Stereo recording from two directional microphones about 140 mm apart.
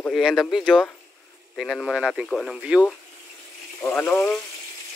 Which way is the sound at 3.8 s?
15° left (ahead or behind).